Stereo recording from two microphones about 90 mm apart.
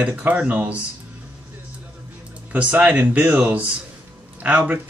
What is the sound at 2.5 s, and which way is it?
Speech, 15° right (ahead or behind).